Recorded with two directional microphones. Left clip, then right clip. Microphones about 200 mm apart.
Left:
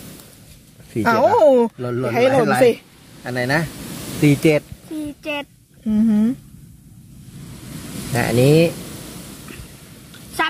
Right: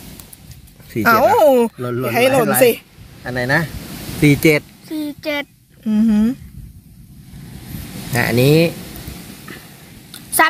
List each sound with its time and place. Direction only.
0.9 s speech: 5° right (ahead or behind)
4.9 s a sound: 45° right (ahead or behind)
5.9 s speech: centre (ahead or behind)
8.1 s speech: 10° right (ahead or behind)